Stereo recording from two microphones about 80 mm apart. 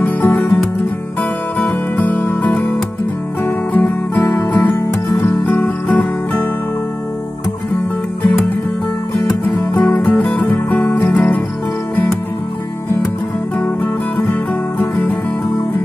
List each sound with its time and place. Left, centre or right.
0.0 s music: left
2.0 s music: left
4.4 s music: left
9.5 s music: left
14.8 s music: centre